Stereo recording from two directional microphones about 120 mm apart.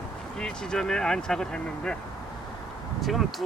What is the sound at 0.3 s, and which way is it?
Speech, 5° left (ahead or behind).